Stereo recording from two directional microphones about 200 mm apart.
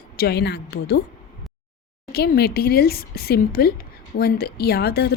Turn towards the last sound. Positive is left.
turn(degrees=55)  # may be behind; listen again after turning